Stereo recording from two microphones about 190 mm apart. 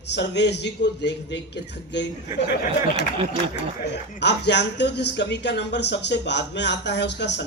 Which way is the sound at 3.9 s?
65° left (ahead or behind).